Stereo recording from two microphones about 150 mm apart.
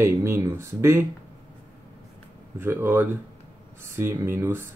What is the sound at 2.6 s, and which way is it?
Speech, 15° right (ahead or behind).